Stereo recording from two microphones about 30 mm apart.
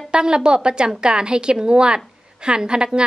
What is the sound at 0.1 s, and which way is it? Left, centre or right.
Speech, right.